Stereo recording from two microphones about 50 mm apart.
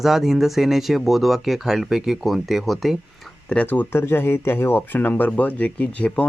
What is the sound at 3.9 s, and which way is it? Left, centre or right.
Speech, left.